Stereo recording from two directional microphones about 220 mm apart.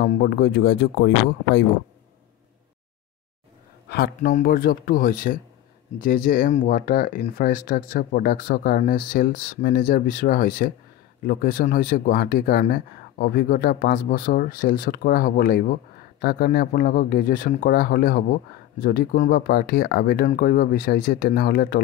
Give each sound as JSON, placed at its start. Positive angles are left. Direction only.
{"t": 0.0, "sound": "speech", "side_deg": 45}
{"t": 3.9, "sound": "speech", "side_deg": 40}